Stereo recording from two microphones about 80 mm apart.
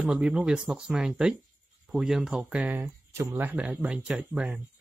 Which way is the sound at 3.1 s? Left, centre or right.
Right.